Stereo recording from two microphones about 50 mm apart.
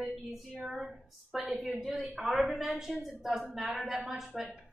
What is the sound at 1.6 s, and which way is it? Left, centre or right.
Speech, centre.